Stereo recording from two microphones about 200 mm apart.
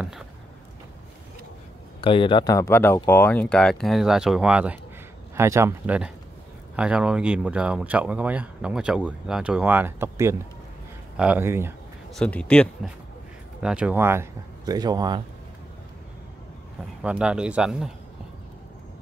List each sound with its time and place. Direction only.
2.0 s speech: 25° left (ahead or behind); by 11.7 s 10° right (ahead or behind)
12.1 s speech: 5° left (ahead or behind)
13.6 s speech: 5° right (ahead or behind); by 15.2 s 20° right (ahead or behind)
17.0 s speech: 5° right (ahead or behind)